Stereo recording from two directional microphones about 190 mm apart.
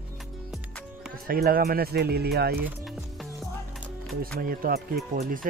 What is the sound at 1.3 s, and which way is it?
Speech, 55° right (ahead or behind).